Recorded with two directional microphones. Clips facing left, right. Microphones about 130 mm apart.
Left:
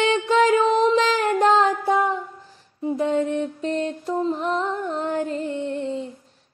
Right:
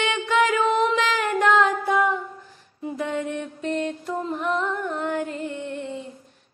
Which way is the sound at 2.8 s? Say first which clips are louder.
Left 6 dB; 30° left (ahead or behind).